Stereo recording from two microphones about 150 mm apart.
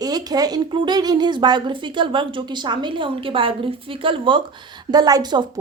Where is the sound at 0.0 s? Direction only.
25° right (ahead or behind).